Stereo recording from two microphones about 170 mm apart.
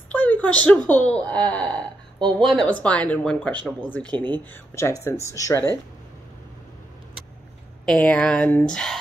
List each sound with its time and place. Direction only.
0.1 s speech: 10° left (ahead or behind)
7.8 s speech: 5° left (ahead or behind)